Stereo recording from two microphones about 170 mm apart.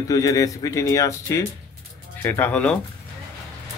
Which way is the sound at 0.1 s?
20° left (ahead or behind).